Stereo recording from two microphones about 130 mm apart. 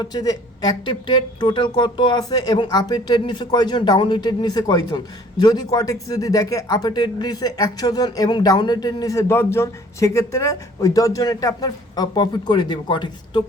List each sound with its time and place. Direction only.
0.0 s speech: 30° left (ahead or behind)